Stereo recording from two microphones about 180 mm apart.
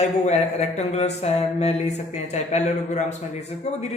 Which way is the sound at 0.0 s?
35° left (ahead or behind).